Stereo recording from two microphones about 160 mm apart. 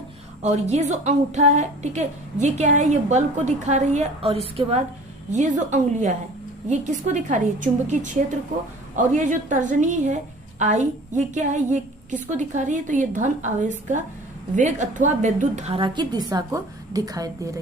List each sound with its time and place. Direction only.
0.4 s a woman's voice: 45° right (ahead or behind)
9.0 s a woman's voice: 50° right (ahead or behind); by 17.5 s 20° right (ahead or behind)